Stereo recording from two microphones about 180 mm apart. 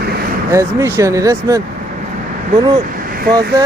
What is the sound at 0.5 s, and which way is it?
Speech, 15° right (ahead or behind).